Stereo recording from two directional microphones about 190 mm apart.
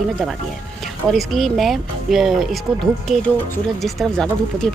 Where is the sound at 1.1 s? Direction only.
Centre (ahead or behind).